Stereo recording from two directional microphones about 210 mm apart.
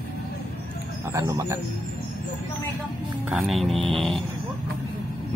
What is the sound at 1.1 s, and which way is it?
Speech, 15° right (ahead or behind).